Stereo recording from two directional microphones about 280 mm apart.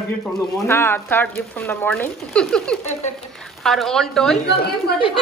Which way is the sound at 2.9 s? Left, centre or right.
Left.